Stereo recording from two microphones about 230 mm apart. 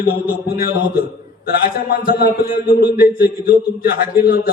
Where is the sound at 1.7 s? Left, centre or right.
Left.